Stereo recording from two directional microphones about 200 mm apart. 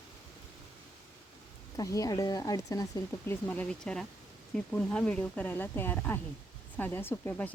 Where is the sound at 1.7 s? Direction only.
15° left (ahead or behind).